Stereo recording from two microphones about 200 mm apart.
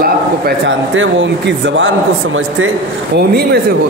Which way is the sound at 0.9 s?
70° right (ahead or behind).